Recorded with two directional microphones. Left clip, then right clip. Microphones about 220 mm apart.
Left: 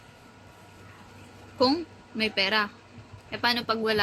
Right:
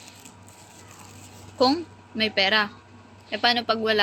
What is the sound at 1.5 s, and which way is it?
A woman's voice, 20° left (ahead or behind).